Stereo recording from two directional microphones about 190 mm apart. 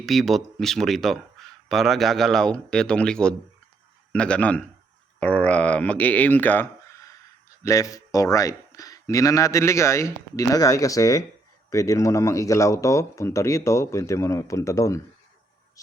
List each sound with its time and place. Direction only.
0.0 s speech: centre (ahead or behind)